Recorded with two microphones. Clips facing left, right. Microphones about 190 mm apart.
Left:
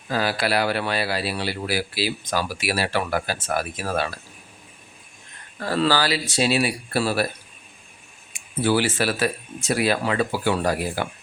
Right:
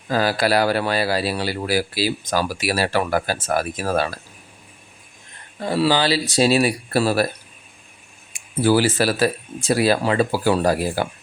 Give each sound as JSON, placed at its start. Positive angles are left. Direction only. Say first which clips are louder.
{"t": 0.1, "sound": "speech", "louder": "right 4 dB", "side_deg": -40}
{"t": 5.5, "sound": "speech", "louder": "right 2 dB", "side_deg": -15}
{"t": 6.1, "sound": "speech", "louder": "right 5 dB", "side_deg": -40}
{"t": 8.3, "sound": "speech", "louder": "right 4 dB", "side_deg": -40}